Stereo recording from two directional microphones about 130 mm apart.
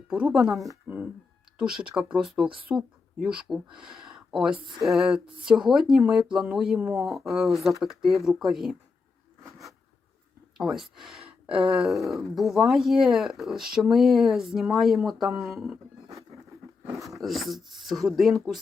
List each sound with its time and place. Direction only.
0.1 s speech: 5° right (ahead or behind)
10.6 s speech: 5° right (ahead or behind)
17.1 s speech: centre (ahead or behind)